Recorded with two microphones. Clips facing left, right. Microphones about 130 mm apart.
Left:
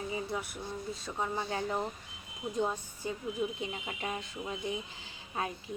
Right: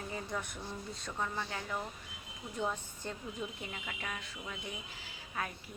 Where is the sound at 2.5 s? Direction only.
15° left (ahead or behind).